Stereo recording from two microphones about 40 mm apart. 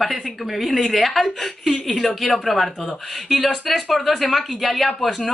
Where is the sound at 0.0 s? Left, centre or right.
Centre.